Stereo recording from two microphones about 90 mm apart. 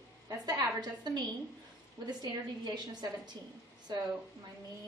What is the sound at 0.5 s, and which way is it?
A woman's voice, 50° right (ahead or behind).